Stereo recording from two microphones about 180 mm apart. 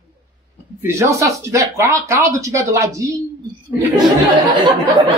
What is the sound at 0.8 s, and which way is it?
Speech, 15° right (ahead or behind).